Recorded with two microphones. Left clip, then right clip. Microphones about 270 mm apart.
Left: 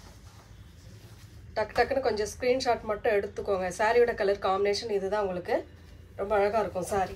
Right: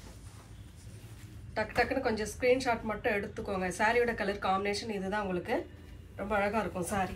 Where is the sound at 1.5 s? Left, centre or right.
Left.